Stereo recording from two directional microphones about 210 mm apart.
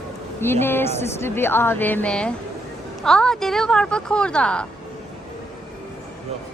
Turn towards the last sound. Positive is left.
turn(degrees=5)  # may be behind; listen again after turning